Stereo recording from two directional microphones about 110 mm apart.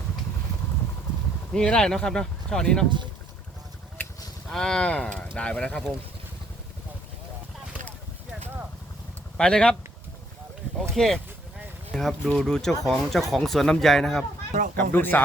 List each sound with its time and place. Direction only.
1.5 s speech: 5° left (ahead or behind)
4.4 s speech: 5° left (ahead or behind)
9.4 s speech: 5° left (ahead or behind)
10.9 s speech: 5° left (ahead or behind)
14.8 s speech: 15° left (ahead or behind)